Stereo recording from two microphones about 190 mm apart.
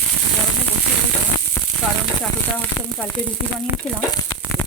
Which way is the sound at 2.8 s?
15° left (ahead or behind).